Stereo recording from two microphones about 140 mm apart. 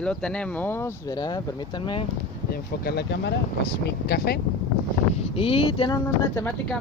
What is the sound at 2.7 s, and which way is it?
Speech, 90° left.